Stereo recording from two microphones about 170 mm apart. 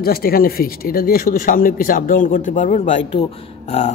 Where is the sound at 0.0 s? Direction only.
60° left (ahead or behind).